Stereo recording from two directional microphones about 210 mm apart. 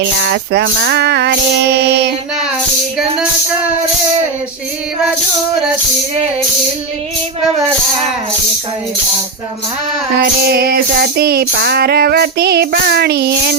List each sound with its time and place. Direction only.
0.0 s music: 55° right (ahead or behind)
10.2 s music: 50° right (ahead or behind)